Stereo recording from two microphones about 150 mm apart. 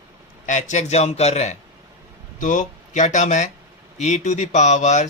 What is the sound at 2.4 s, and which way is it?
Speech, 60° left (ahead or behind).